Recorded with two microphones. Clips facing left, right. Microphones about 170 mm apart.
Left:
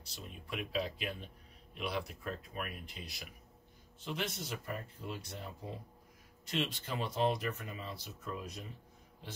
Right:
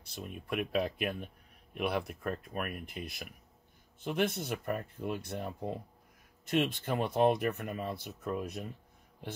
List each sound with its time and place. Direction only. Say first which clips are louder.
0.0 s speech: right 6 dB; 55° right (ahead or behind)